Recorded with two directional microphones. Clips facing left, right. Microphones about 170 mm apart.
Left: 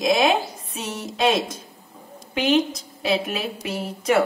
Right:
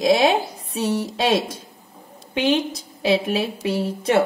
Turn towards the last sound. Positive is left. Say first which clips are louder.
# right 2 dB
turn(degrees=-30)  # may be behind; listen again after turning